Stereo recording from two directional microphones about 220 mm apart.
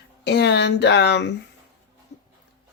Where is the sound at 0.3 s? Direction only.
50° left (ahead or behind).